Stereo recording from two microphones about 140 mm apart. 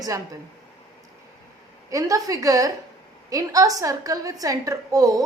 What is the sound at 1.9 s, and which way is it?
A woman's voice, 25° right (ahead or behind).